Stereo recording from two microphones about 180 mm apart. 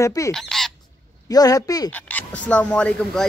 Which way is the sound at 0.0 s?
15° left (ahead or behind).